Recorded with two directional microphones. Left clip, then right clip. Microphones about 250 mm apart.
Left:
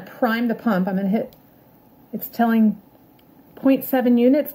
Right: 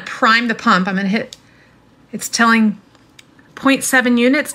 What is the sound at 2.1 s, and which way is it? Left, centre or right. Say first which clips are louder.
Speech: right 8 dB; right.